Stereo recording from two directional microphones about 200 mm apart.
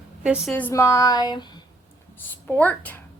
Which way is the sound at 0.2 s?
5° right (ahead or behind).